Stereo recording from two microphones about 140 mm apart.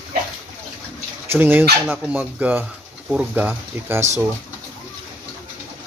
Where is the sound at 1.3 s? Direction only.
15° right (ahead or behind).